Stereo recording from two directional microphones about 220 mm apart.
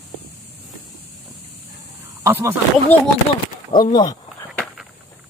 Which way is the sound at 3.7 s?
20° left (ahead or behind).